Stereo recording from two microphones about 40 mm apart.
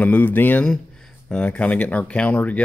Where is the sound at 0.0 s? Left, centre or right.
Left.